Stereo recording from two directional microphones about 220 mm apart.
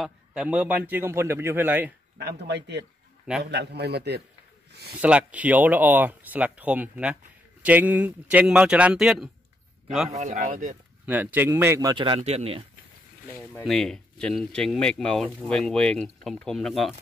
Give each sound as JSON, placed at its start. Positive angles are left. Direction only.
{"t": 0.0, "sound": "speech", "side_deg": -5}
{"t": 2.1, "sound": "a man's voice", "side_deg": -50}
{"t": 5.0, "sound": "speech", "side_deg": -5}
{"t": 10.0, "sound": "speech", "side_deg": -30}
{"t": 11.1, "sound": "speech", "side_deg": -10}
{"t": 13.7, "sound": "speech", "side_deg": 0}